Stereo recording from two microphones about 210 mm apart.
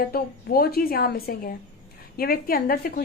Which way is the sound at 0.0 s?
45° left (ahead or behind).